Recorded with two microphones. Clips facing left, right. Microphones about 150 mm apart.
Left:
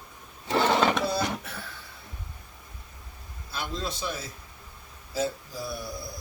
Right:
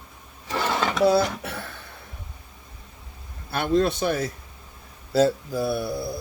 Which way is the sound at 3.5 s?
65° right (ahead or behind).